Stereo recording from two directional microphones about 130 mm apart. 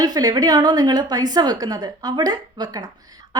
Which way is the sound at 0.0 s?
30° right (ahead or behind).